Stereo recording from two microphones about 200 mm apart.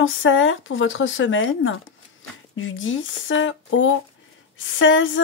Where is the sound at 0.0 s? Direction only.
75° left (ahead or behind).